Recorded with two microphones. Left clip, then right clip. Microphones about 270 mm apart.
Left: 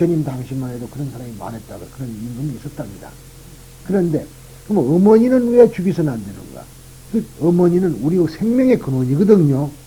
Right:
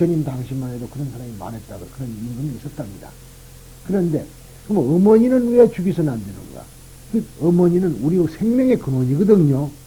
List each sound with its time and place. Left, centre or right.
0.0 s speech: right
1.4 s speech: right
2.6 s speech: right
3.8 s speech: right
7.4 s speech: right